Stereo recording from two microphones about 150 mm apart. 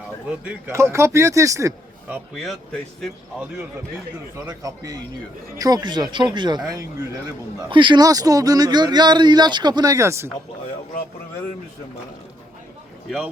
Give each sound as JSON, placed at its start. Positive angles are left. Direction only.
{"t": 0.3, "sound": "speech", "side_deg": -10}
{"t": 2.3, "sound": "speech", "side_deg": 0}
{"t": 4.4, "sound": "a man's voice", "side_deg": -20}
{"t": 7.7, "sound": "speech", "side_deg": -30}